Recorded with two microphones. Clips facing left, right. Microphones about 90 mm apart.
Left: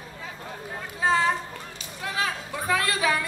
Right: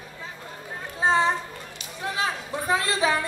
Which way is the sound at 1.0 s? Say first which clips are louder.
Right 1 dB; 20° right (ahead or behind).